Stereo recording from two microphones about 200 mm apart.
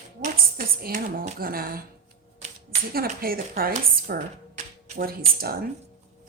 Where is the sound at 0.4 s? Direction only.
50° right (ahead or behind).